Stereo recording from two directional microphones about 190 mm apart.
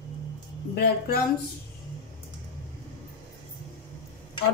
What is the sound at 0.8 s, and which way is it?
Speech, 55° left (ahead or behind).